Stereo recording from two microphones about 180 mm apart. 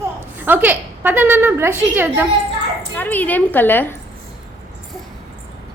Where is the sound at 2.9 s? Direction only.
10° left (ahead or behind).